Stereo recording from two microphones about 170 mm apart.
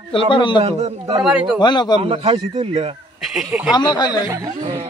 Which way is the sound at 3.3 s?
5° right (ahead or behind).